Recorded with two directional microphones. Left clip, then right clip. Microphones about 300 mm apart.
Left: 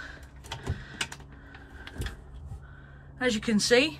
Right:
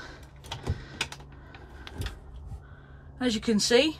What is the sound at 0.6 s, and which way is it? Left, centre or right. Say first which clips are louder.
Mechanisms: right 1 dB; centre.